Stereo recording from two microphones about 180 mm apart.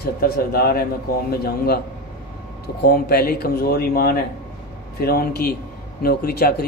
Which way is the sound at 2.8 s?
60° left (ahead or behind).